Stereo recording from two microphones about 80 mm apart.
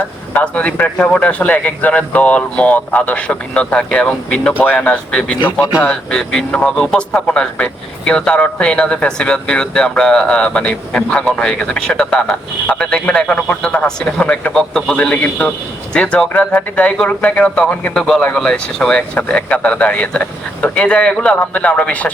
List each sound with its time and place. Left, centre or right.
0.3 s a man's voice: centre
14.9 s speech: centre